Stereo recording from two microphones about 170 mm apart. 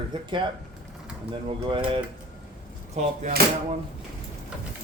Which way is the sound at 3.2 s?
45° right (ahead or behind).